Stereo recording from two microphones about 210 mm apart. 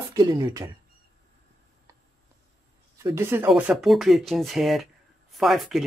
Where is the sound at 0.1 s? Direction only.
20° right (ahead or behind).